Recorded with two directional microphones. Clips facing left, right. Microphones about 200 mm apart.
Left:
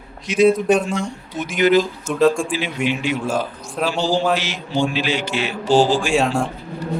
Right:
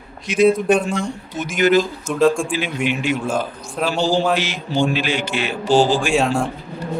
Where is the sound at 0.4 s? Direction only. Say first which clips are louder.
Even; centre (ahead or behind).